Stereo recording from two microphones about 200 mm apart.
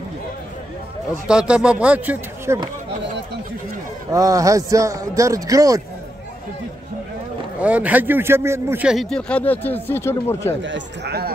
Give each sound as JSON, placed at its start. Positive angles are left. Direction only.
{"t": 1.2, "sound": "a man's voice", "side_deg": -5}
{"t": 4.1, "sound": "a man's voice", "side_deg": -15}
{"t": 7.6, "sound": "a man's voice", "side_deg": -5}
{"t": 10.6, "sound": "speech", "side_deg": -60}